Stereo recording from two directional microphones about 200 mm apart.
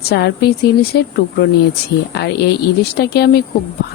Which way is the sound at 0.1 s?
55° left (ahead or behind).